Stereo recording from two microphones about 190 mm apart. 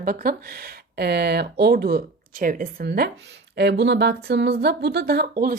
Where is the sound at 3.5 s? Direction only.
65° right (ahead or behind).